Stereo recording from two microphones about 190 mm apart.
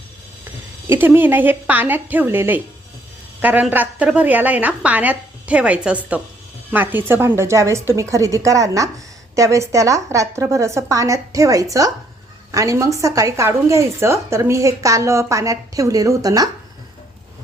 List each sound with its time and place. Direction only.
0.9 s a woman's voice: 10° right (ahead or behind)